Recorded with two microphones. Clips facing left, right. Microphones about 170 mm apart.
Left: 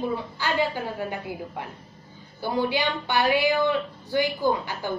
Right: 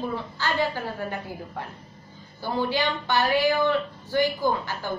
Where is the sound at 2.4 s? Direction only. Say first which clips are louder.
Left 1 dB; 15° left (ahead or behind).